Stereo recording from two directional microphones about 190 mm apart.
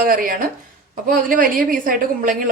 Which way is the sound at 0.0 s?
50° right (ahead or behind).